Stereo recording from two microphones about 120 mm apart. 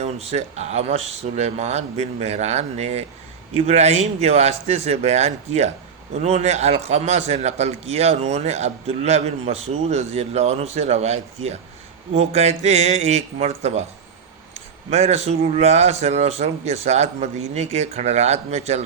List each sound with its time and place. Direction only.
0.0 s a man's voice: 65° right (ahead or behind)
14.8 s a man's voice: 65° right (ahead or behind)